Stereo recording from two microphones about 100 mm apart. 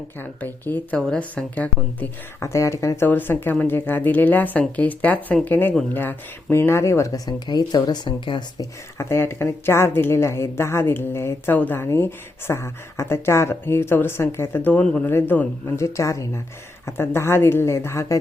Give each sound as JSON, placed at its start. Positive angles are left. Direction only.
{"t": 0.2, "sound": "speech", "side_deg": 20}
{"t": 0.9, "sound": "a woman's voice", "side_deg": 5}
{"t": 2.4, "sound": "speech", "side_deg": 30}
{"t": 8.5, "sound": "speech", "side_deg": 30}